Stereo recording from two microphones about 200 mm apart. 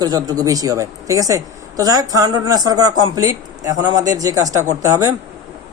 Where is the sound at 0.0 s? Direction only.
20° right (ahead or behind).